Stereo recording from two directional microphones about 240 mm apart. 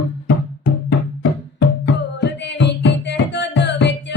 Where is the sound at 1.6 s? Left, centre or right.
Left.